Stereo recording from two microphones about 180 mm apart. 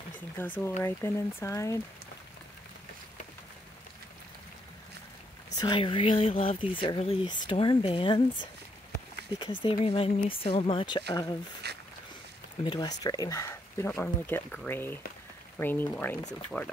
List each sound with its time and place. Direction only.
0.4 s speech: 10° left (ahead or behind)
5.6 s speech: 25° left (ahead or behind)
11.6 s a sound: 65° right (ahead or behind)
12.6 s speech: 25° left (ahead or behind); by 16.7 s 5° left (ahead or behind)